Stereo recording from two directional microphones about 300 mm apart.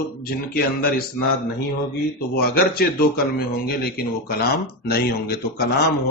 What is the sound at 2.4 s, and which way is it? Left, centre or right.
Speech, left.